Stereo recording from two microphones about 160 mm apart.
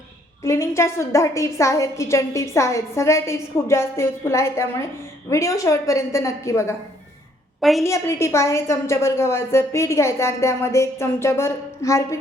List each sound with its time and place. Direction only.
0.4 s a woman's voice: 15° left (ahead or behind)
7.6 s a woman's voice: centre (ahead or behind)
7.9 s a woman's voice: 15° left (ahead or behind)